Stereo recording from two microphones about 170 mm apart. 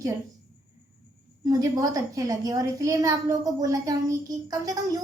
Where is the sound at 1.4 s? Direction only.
20° right (ahead or behind).